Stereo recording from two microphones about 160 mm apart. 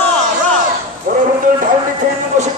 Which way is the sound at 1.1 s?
60° right (ahead or behind).